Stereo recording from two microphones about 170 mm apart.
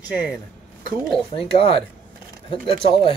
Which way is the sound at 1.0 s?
5° left (ahead or behind).